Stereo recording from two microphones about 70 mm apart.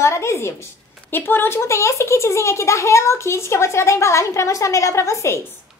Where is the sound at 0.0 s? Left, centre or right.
Left.